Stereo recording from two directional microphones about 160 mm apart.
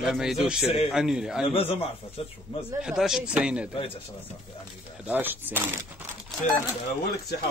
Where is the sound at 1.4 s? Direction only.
35° left (ahead or behind).